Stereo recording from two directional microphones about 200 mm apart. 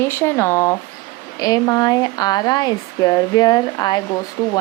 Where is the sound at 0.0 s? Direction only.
10° left (ahead or behind).